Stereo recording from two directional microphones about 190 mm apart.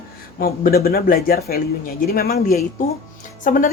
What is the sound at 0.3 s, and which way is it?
A woman's voice, 50° left (ahead or behind).